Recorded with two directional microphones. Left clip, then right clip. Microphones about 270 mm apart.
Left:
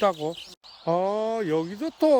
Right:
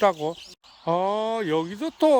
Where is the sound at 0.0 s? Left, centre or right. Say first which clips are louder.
Right 2 dB; centre.